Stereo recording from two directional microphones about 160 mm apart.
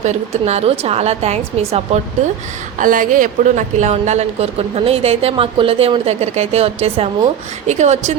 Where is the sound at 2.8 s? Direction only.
55° right (ahead or behind).